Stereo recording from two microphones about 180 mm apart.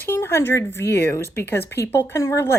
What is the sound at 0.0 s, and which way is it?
A woman's voice, 15° left (ahead or behind).